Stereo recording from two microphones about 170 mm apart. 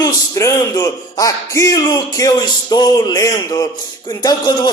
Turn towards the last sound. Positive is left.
turn(degrees=25)  # may be behind; listen again after turning